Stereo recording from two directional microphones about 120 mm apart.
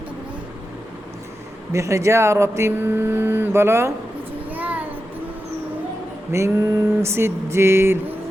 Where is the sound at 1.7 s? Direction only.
25° right (ahead or behind).